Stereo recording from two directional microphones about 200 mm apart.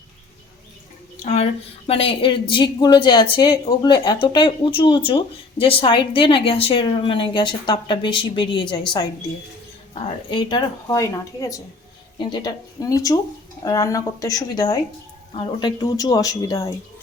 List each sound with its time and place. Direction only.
1.2 s a sound: 35° left (ahead or behind)
1.9 s a woman's voice: 30° left (ahead or behind)
9.9 s a woman's voice: 20° left (ahead or behind)